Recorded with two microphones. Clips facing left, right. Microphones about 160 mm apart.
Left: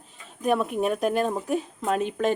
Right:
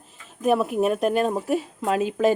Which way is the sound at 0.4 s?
5° right (ahead or behind).